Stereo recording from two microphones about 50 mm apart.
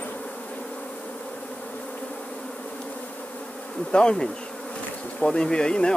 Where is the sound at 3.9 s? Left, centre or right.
Centre.